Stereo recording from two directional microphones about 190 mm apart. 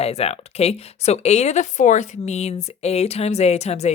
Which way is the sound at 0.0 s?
35° left (ahead or behind).